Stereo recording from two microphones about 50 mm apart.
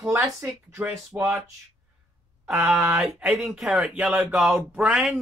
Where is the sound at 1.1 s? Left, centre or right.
Right.